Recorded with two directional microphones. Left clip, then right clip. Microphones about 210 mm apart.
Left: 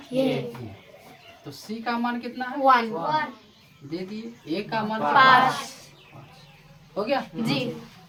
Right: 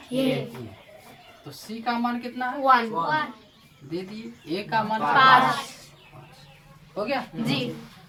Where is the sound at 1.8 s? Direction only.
20° left (ahead or behind).